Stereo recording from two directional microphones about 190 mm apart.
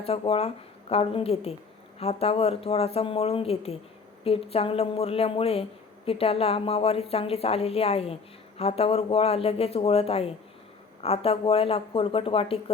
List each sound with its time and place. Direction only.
0.0 s a woman's voice: 30° left (ahead or behind)